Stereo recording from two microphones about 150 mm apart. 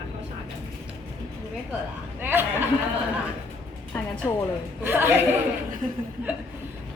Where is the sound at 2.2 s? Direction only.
15° right (ahead or behind).